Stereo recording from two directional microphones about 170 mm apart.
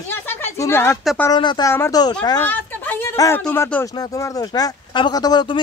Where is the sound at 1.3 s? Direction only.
25° left (ahead or behind).